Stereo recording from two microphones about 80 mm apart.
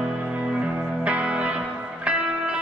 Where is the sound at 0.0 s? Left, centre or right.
Centre.